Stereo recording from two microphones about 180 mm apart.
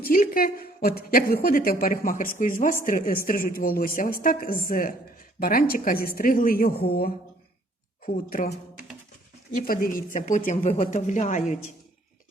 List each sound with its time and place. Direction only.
0.0 s speech: 50° left (ahead or behind)
9.6 s speech: 50° left (ahead or behind)